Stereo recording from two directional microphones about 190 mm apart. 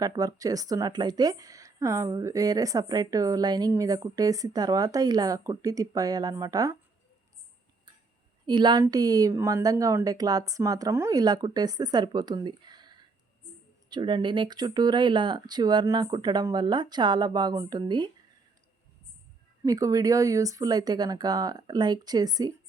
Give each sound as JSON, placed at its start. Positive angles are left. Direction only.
{"t": 0.0, "sound": "speech", "side_deg": -20}
{"t": 8.4, "sound": "speech", "side_deg": -25}
{"t": 19.6, "sound": "speech", "side_deg": -20}